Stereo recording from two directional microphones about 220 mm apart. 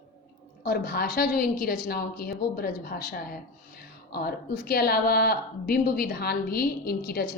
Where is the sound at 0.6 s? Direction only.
45° left (ahead or behind).